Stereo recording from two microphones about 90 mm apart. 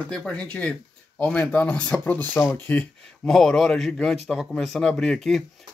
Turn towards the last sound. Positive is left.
turn(degrees=0)  # may be behind; listen again after turning